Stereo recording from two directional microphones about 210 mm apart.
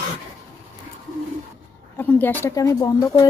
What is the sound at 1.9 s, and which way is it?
Speech, 10° left (ahead or behind).